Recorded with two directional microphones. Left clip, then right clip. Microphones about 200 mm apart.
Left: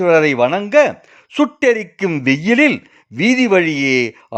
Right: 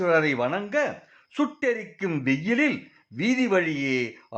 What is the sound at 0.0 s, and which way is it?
Speech, 40° left (ahead or behind).